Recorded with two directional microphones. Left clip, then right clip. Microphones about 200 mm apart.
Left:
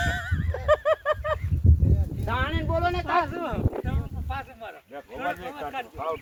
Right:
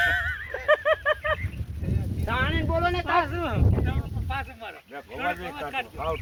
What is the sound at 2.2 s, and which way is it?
Speech, 15° left (ahead or behind).